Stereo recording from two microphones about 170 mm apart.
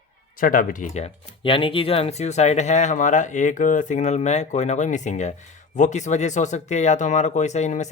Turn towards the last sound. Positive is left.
turn(degrees=45)  # may be behind; listen again after turning